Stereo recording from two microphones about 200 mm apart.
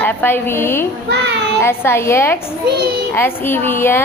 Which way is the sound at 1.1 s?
60° right (ahead or behind).